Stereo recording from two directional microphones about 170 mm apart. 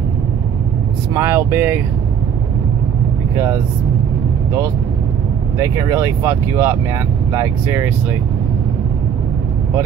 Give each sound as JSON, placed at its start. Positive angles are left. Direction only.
{"t": 1.1, "sound": "speech", "side_deg": -15}
{"t": 5.6, "sound": "speech", "side_deg": -20}